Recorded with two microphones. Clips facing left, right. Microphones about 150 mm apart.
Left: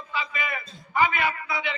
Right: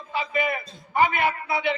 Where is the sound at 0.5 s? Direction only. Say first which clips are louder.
Right 2 dB; 40° right (ahead or behind).